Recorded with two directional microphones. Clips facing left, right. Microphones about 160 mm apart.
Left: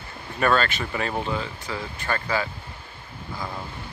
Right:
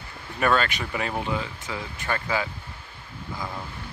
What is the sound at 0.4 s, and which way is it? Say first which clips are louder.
Speech: left 1 dB; 10° right (ahead or behind).